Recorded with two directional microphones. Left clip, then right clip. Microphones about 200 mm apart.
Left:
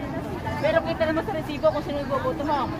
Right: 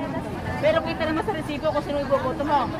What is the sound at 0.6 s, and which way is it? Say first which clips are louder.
Speech: right 1 dB; 50° right (ahead or behind).